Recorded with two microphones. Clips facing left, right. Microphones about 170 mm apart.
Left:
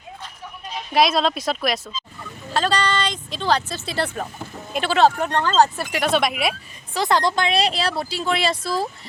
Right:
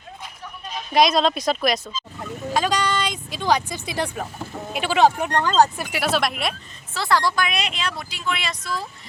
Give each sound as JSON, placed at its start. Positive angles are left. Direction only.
{"t": 0.9, "sound": "speech", "side_deg": 5}
{"t": 2.5, "sound": "speech", "side_deg": -10}
{"t": 6.9, "sound": "speech", "side_deg": 20}